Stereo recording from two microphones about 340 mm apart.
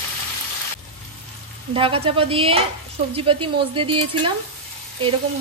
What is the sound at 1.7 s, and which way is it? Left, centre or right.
A woman's voice, centre.